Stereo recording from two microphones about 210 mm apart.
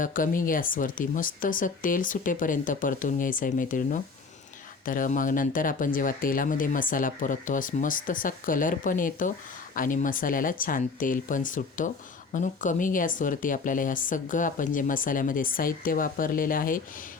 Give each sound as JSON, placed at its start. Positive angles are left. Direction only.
{"t": 0.0, "sound": "speech", "side_deg": 40}